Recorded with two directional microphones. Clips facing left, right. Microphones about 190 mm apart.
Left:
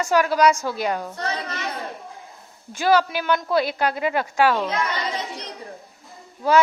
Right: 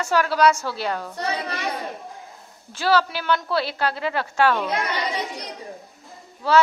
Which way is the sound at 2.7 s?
15° left (ahead or behind).